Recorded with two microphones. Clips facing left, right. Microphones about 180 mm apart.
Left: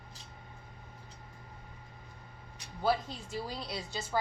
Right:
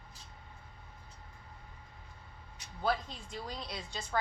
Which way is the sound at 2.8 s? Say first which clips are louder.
Left 3 dB; 5° left (ahead or behind).